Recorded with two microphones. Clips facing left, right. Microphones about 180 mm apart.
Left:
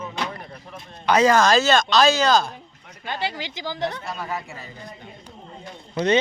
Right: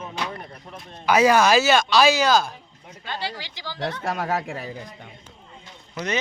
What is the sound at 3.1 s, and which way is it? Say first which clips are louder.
Speech: left 3 dB; 20° left (ahead or behind).